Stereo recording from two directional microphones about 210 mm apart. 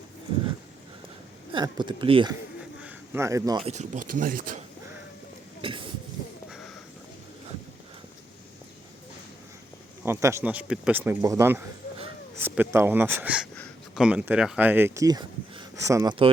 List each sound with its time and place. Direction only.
1.5 s speech: 20° right (ahead or behind)
2.6 s bird: 10° right (ahead or behind)
3.6 s speech: 30° right (ahead or behind)
5.6 s a sound: 25° right (ahead or behind)
10.0 s speech: 15° right (ahead or behind)